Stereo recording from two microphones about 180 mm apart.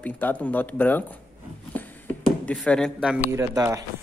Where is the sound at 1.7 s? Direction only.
10° left (ahead or behind).